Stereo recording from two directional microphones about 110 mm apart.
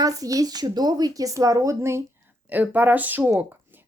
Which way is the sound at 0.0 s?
35° right (ahead or behind).